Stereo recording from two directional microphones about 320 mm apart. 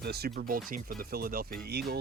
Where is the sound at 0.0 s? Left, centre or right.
Right.